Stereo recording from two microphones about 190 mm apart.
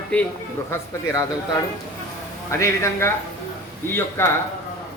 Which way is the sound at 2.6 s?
15° left (ahead or behind).